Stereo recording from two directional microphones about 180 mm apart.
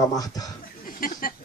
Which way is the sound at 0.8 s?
50° left (ahead or behind).